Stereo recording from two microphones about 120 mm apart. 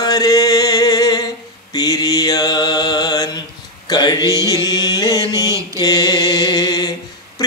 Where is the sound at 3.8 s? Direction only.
35° left (ahead or behind).